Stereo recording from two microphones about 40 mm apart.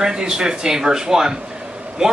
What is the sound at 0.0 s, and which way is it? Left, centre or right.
Speech, centre.